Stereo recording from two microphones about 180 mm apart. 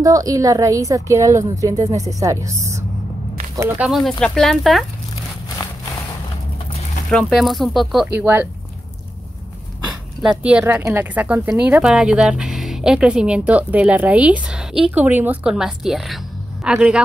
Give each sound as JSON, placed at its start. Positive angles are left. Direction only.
{"t": 0.0, "sound": "a woman's voice", "side_deg": -20}
{"t": 5.6, "sound": "a sound", "side_deg": 25}
{"t": 7.1, "sound": "speech", "side_deg": 5}
{"t": 10.4, "sound": "a woman's voice", "side_deg": -10}